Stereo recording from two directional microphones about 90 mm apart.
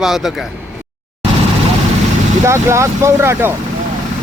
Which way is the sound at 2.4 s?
30° right (ahead or behind).